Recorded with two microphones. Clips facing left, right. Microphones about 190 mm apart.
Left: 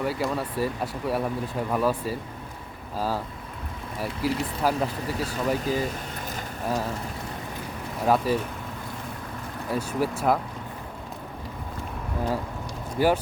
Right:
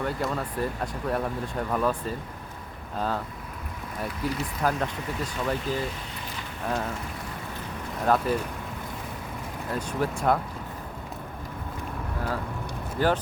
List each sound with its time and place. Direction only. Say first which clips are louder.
0.0 s speech: left 2 dB; 5° left (ahead or behind)
5.6 s boat: left 3 dB; 45° left (ahead or behind)
8.0 s speech: left 1 dB; 5° left (ahead or behind)
9.7 s speech: left 2 dB; 5° left (ahead or behind)
13.0 s speech: left 2 dB; 10° left (ahead or behind)